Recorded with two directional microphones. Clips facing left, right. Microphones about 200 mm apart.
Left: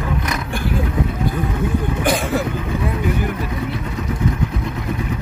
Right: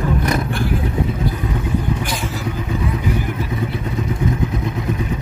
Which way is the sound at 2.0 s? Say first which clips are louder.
Left 6 dB; 55° left (ahead or behind).